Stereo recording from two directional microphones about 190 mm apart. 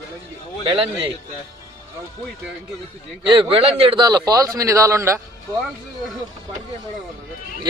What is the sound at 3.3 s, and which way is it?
A man's voice, 30° right (ahead or behind).